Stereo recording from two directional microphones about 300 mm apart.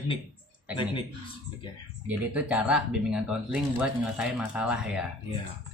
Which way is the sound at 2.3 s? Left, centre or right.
Centre.